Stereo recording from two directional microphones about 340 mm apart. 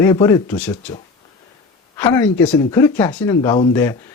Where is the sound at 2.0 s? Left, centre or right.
Centre.